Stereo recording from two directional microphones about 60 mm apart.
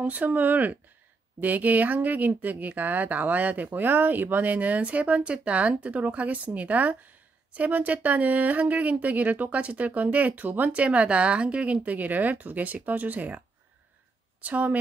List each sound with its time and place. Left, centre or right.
0.0 s speech: right
14.4 s speech: right